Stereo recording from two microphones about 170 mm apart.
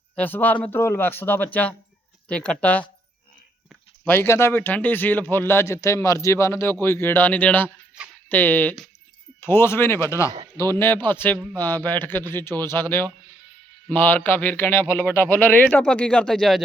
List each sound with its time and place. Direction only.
0.2 s speech: 10° left (ahead or behind)
4.0 s speech: 10° left (ahead or behind)
10.3 s a man's voice: 20° right (ahead or behind)
10.7 s speech: 15° left (ahead or behind)